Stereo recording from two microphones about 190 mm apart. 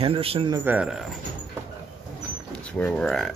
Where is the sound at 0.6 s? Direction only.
10° right (ahead or behind).